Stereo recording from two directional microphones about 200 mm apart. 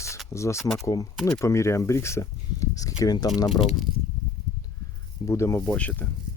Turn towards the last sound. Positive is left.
turn(degrees=5)  # may be behind; listen again after turning